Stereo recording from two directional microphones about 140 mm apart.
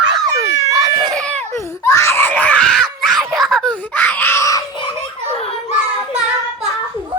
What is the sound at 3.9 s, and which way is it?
Screaming, 10° left (ahead or behind).